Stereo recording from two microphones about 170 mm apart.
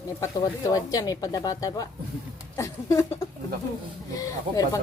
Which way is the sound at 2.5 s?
15° left (ahead or behind).